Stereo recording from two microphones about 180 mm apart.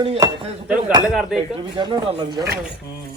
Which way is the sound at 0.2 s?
20° right (ahead or behind).